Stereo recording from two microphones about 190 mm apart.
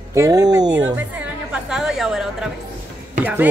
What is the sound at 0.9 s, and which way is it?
A woman's voice, 5° right (ahead or behind).